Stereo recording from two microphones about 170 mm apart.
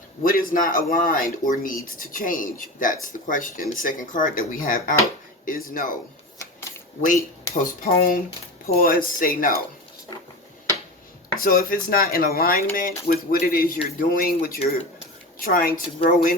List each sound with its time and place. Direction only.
0.2 s speech: 55° left (ahead or behind)
7.9 s speech: 55° left (ahead or behind)
11.3 s speech: 55° left (ahead or behind)